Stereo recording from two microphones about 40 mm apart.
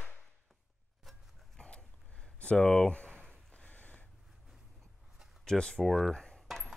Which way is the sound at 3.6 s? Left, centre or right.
Left.